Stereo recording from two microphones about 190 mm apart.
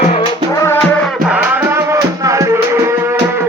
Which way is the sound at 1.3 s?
10° right (ahead or behind).